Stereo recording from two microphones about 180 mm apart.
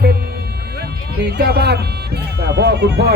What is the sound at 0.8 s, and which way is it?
Speech, 65° right (ahead or behind).